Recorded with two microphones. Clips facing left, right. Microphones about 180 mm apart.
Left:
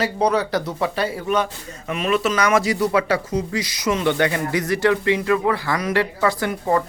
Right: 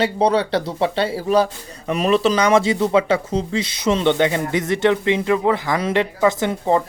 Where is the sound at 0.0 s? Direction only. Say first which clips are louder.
Right 2 dB; 30° right (ahead or behind).